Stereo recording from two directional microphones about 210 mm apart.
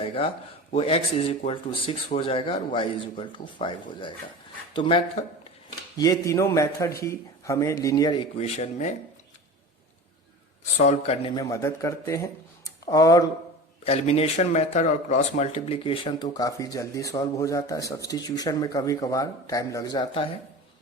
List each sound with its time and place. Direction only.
0.0 s a man's voice: 25° left (ahead or behind)
10.8 s speech: 30° left (ahead or behind)
11.3 s speech: 15° left (ahead or behind)
13.8 s speech: 30° left (ahead or behind)